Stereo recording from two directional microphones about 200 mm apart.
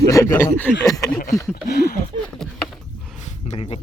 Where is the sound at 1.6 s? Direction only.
50° left (ahead or behind).